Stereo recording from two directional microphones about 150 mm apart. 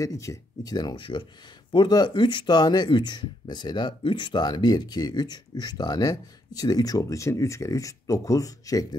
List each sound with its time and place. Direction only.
0.0 s speech: 20° left (ahead or behind)